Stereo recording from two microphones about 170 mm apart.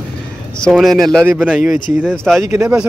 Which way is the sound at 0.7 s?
Centre (ahead or behind).